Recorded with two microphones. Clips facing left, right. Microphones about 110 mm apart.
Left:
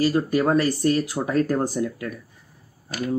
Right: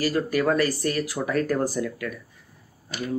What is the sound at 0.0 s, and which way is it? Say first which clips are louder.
Speech: left 3 dB; 25° left (ahead or behind).